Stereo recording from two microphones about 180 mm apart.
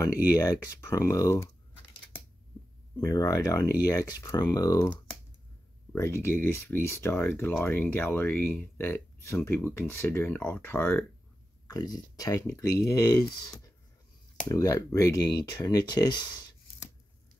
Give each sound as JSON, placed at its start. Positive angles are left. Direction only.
{"t": 0.0, "sound": "speech", "side_deg": 20}
{"t": 3.0, "sound": "speech", "side_deg": 20}
{"t": 5.9, "sound": "speech", "side_deg": 15}
{"t": 11.6, "sound": "speech", "side_deg": 20}